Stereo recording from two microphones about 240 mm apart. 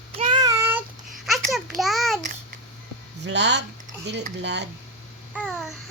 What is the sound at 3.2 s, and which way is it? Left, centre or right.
Speech, right.